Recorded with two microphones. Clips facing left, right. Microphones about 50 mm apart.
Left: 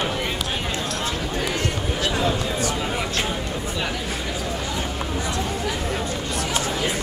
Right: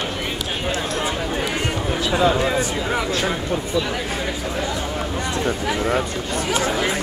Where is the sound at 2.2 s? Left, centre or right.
Right.